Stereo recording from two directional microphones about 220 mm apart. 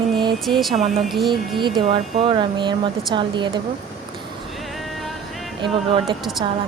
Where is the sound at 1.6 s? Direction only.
20° right (ahead or behind).